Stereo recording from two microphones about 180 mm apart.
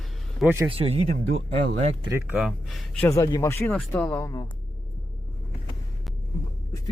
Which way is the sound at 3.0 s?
20° left (ahead or behind).